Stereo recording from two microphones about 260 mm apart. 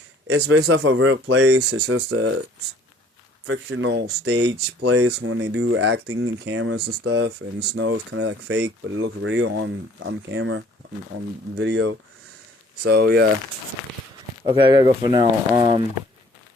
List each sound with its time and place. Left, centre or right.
0.3 s speech: right
1.5 s speech: right
3.4 s speech: right
14.4 s speech: centre